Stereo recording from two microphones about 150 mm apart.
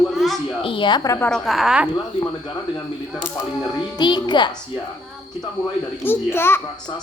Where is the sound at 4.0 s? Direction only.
30° left (ahead or behind).